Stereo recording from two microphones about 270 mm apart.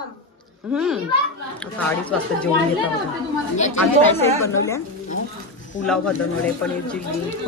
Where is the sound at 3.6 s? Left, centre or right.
Left.